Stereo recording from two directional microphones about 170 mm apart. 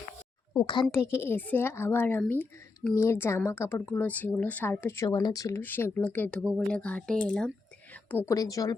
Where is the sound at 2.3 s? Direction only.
15° left (ahead or behind).